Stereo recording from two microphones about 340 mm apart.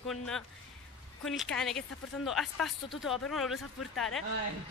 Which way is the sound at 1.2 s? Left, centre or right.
Centre.